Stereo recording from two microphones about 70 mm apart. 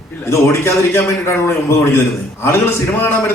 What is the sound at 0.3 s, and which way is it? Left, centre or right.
A man's voice, left.